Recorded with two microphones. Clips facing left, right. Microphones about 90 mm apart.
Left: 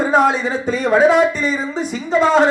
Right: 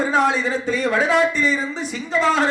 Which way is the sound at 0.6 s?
35° left (ahead or behind).